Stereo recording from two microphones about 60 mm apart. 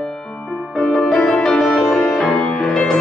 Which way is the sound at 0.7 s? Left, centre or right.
Centre.